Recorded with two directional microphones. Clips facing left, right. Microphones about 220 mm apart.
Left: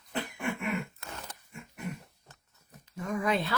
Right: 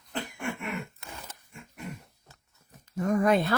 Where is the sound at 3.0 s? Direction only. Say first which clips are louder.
Right 6 dB; 45° right (ahead or behind).